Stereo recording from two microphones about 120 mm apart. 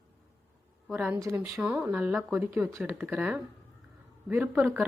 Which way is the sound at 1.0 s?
20° right (ahead or behind).